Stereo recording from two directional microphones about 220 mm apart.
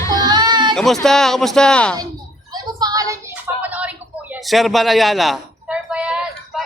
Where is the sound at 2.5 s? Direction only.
15° right (ahead or behind).